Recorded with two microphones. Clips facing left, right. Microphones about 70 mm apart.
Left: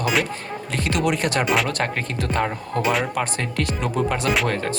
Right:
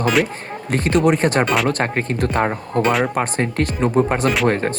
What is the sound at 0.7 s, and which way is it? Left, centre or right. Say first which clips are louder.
Speech: right 7 dB; right.